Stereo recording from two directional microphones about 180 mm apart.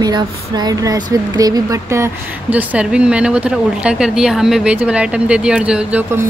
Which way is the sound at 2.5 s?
5° right (ahead or behind).